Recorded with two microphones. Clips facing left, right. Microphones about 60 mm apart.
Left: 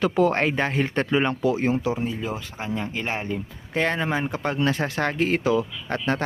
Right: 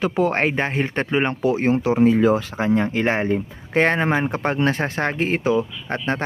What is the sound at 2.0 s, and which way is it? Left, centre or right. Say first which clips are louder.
Speech: right 13 dB; right.